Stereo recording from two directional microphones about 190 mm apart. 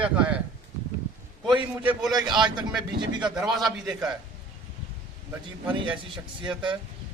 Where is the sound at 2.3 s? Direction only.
25° right (ahead or behind).